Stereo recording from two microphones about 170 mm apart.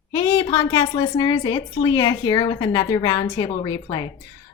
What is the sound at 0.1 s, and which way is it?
A woman's voice, 20° left (ahead or behind).